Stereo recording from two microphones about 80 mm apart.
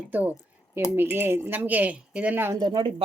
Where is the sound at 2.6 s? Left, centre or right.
Right.